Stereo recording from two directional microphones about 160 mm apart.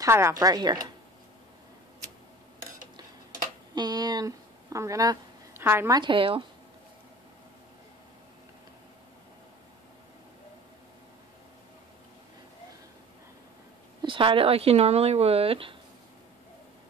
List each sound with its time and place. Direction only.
0.0 s speech: 20° right (ahead or behind)
3.7 s a sound: 25° right (ahead or behind)
5.9 s speech: 30° right (ahead or behind)
14.0 s speech: 30° right (ahead or behind)